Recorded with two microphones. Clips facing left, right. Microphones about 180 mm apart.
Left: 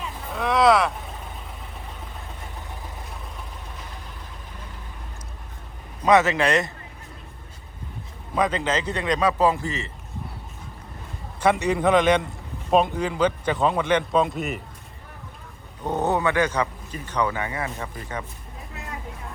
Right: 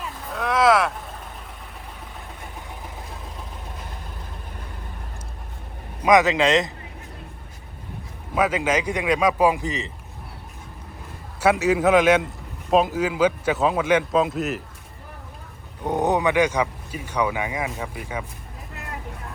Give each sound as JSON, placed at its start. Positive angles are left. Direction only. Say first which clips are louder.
{"t": 0.3, "sound": "vehicle", "louder": "even", "side_deg": 0}
{"t": 6.0, "sound": "speech", "louder": "right 1 dB", "side_deg": -15}
{"t": 8.4, "sound": "speech", "louder": "right 2 dB", "side_deg": -10}
{"t": 11.3, "sound": "a man's voice", "louder": "right 2 dB", "side_deg": -5}
{"t": 15.8, "sound": "speech", "louder": "right 2 dB", "side_deg": -15}